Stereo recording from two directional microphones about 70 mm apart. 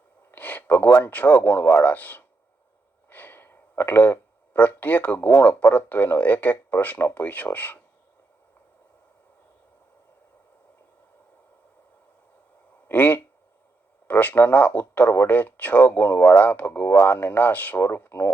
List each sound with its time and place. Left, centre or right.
0.3 s a sound: left
1.0 s speech: left
12.9 s speech: left